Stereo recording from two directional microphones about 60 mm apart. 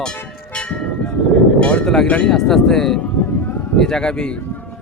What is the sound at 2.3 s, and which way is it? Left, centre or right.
Speech, centre.